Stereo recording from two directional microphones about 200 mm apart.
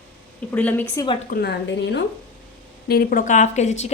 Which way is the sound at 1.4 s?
55° left (ahead or behind).